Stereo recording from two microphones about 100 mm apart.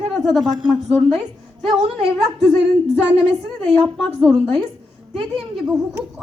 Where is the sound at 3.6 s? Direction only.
20° left (ahead or behind).